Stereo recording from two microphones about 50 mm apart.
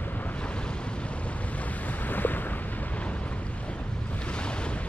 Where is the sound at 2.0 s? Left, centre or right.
Left.